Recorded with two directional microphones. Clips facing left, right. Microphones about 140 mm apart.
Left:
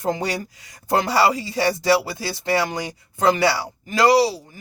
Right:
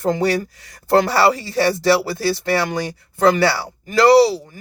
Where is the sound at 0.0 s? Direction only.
15° left (ahead or behind).